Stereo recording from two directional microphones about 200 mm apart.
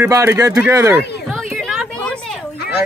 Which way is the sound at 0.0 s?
15° right (ahead or behind).